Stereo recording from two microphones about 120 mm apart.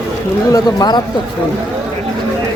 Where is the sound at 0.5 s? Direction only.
35° left (ahead or behind).